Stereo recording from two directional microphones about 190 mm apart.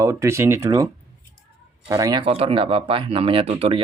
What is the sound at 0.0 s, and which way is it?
Speech, 15° right (ahead or behind).